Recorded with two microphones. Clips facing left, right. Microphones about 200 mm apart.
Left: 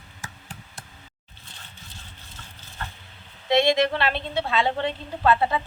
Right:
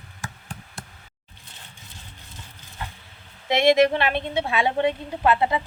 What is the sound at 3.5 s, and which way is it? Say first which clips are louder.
A woman's voice: right 3 dB; 20° right (ahead or behind).